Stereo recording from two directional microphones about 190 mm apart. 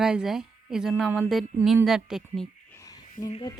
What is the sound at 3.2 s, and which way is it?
Speech, 45° left (ahead or behind).